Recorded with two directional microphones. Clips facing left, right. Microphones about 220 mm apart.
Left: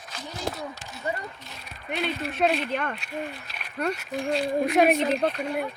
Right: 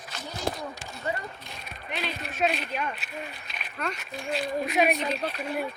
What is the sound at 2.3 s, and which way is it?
Speech, 60° left (ahead or behind).